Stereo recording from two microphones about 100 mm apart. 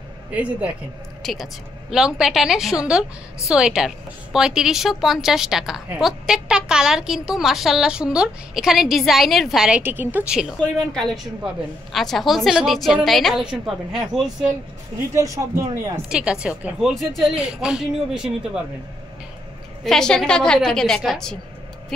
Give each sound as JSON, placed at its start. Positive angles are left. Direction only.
{"t": 0.3, "sound": "speech", "side_deg": -15}
{"t": 1.2, "sound": "a woman's voice", "side_deg": -5}
{"t": 9.7, "sound": "speech", "side_deg": -15}
{"t": 10.6, "sound": "a woman's voice", "side_deg": 5}
{"t": 15.1, "sound": "speech", "side_deg": -30}
{"t": 16.1, "sound": "speech", "side_deg": -10}
{"t": 16.9, "sound": "a woman's voice", "side_deg": 0}
{"t": 19.8, "sound": "a woman's voice", "side_deg": 5}